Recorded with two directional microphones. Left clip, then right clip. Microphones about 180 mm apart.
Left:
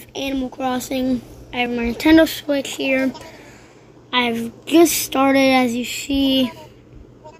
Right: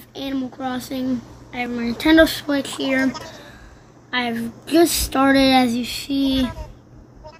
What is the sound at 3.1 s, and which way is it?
Speech, 25° right (ahead or behind).